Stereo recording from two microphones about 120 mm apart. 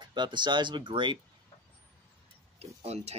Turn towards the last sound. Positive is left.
turn(degrees=-60)  # may be behind; listen again after turning